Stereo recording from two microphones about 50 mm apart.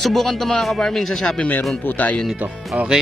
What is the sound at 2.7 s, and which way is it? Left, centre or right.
Speech, right.